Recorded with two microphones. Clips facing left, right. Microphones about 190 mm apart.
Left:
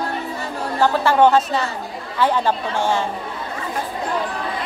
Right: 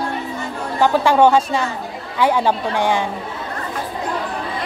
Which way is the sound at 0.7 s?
15° right (ahead or behind).